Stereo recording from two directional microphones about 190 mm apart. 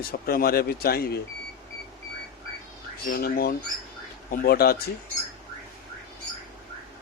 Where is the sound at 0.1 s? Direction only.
50° left (ahead or behind).